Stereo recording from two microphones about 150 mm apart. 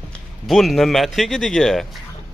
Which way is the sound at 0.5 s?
Centre (ahead or behind).